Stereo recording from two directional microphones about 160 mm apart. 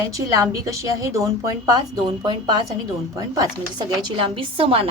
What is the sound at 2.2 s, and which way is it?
A woman's voice, 30° right (ahead or behind).